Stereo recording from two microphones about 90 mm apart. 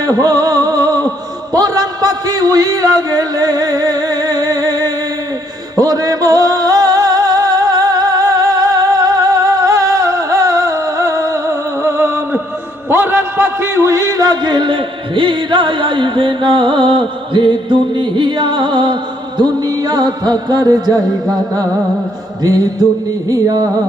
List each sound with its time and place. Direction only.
0.0 s music: 45° right (ahead or behind)
1.5 s a sound: 45° right (ahead or behind)
5.7 s music: 45° right (ahead or behind); by 12.4 s 25° right (ahead or behind)
12.9 s speech: 25° right (ahead or behind); by 18.9 s 60° right (ahead or behind)
19.4 s music: 45° right (ahead or behind)
22.4 s music: 40° right (ahead or behind)